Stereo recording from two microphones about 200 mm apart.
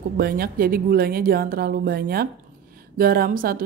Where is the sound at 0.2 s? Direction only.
50° right (ahead or behind).